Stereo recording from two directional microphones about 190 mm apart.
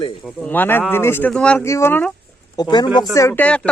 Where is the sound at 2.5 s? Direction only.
25° left (ahead or behind).